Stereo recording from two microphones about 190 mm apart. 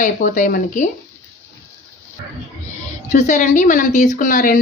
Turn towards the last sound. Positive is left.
turn(degrees=45)  # may be behind; listen again after turning